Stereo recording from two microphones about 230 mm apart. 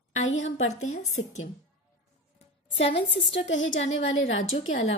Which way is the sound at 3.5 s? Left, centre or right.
Left.